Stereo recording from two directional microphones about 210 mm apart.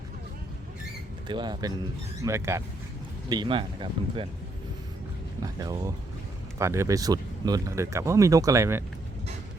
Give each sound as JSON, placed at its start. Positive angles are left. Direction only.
{"t": 1.3, "sound": "speech", "side_deg": -20}
{"t": 5.4, "sound": "speech", "side_deg": -20}